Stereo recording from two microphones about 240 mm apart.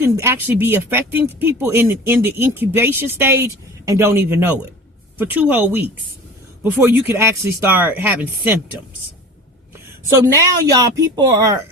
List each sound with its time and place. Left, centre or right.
0.0 s speech: centre
10.2 s speech: centre